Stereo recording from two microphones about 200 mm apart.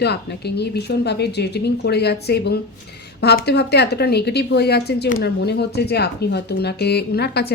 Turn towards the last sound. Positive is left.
turn(degrees=55)  # may be behind; listen again after turning